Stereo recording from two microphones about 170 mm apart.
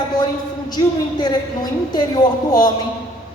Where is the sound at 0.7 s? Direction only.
25° left (ahead or behind).